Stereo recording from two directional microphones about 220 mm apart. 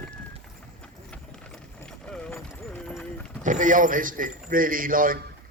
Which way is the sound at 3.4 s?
35° right (ahead or behind).